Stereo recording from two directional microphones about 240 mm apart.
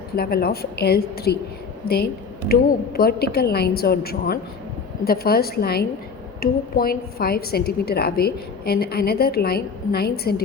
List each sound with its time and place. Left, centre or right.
0.2 s a woman's voice: left
2.5 s a woman's voice: left